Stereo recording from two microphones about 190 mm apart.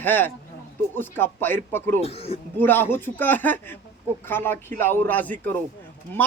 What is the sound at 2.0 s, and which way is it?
Speech, 30° left (ahead or behind).